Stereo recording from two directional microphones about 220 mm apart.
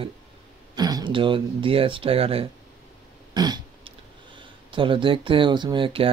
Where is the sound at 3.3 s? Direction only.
20° right (ahead or behind).